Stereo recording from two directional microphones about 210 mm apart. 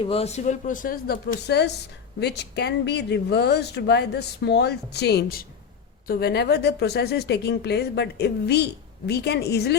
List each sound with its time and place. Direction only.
0.0 s speech: 25° left (ahead or behind); by 9.7 s 50° left (ahead or behind)